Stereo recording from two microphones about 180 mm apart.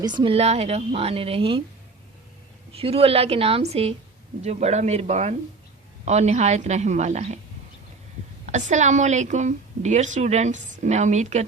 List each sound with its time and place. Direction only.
0.0 s a woman's voice: 25° right (ahead or behind)
2.7 s a woman's voice: 30° right (ahead or behind)
8.4 s a woman's voice: 40° right (ahead or behind)